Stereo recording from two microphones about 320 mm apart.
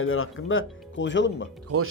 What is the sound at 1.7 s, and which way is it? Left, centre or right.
Speech, right.